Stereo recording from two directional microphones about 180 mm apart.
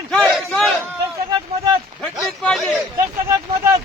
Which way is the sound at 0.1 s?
Centre (ahead or behind).